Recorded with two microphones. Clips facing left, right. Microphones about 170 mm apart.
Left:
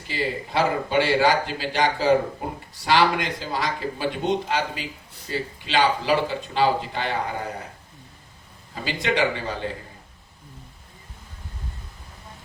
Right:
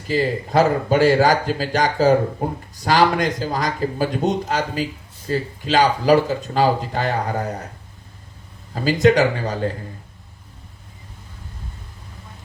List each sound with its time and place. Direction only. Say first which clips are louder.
0.1 s speech: right 7 dB; 45° right (ahead or behind)
8.7 s speech: right 10 dB; 45° right (ahead or behind)